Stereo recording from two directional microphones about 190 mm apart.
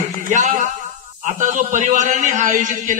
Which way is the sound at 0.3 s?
40° right (ahead or behind).